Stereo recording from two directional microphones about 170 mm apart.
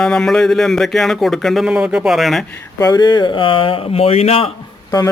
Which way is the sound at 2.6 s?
20° left (ahead or behind).